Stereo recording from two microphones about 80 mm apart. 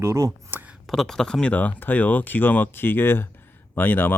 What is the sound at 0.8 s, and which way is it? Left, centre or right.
Speech, centre.